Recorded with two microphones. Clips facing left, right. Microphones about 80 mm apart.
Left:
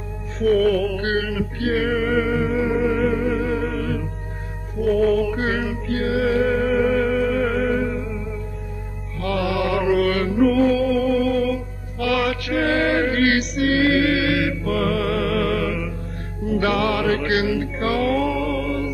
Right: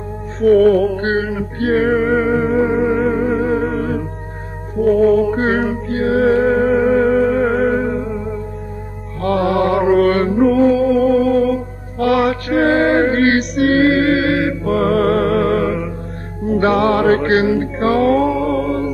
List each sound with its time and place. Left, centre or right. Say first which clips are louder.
0.4 s music: right 7 dB; right